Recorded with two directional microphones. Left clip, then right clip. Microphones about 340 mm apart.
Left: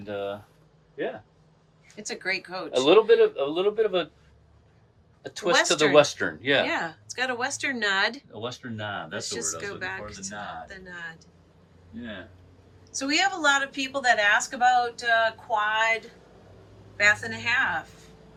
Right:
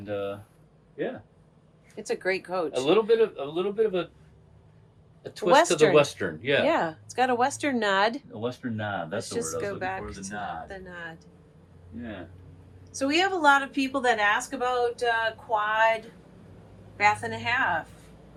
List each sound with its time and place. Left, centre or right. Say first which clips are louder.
0.0 s speech: even; centre
2.0 s speech: right 2 dB; centre
2.8 s a man's voice: left 5 dB; left
5.2 s speech: right 3 dB; centre
6.7 s speech: right 4 dB; centre
12.9 s speech: even; centre